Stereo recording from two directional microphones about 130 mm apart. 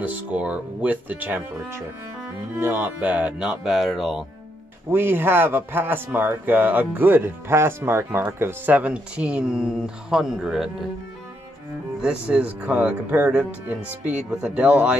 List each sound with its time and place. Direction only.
0.0 s speech: 10° right (ahead or behind)
2.6 s speech: 15° right (ahead or behind)
4.9 s speech: 15° right (ahead or behind)
12.0 s speech: 10° right (ahead or behind)